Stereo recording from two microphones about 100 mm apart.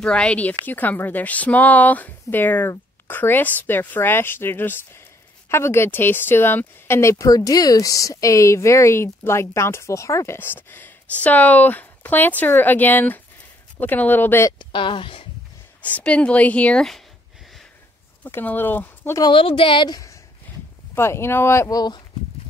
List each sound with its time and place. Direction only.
0.0 s speech: 10° left (ahead or behind)
14.6 s speech: 55° left (ahead or behind)
15.8 s speech: 15° left (ahead or behind)
18.2 s speech: 20° left (ahead or behind)
19.3 s speech: 60° left (ahead or behind)
20.9 s speech: 25° left (ahead or behind); by 22.0 s 40° left (ahead or behind)